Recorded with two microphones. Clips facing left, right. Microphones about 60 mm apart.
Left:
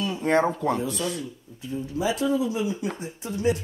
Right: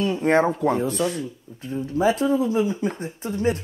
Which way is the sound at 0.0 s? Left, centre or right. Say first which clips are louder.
Right 3 dB; right.